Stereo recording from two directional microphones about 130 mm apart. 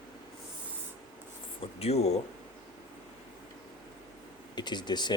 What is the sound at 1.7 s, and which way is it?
Speech, 55° left (ahead or behind).